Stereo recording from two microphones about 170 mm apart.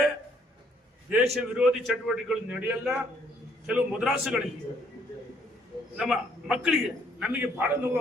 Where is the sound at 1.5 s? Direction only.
5° right (ahead or behind).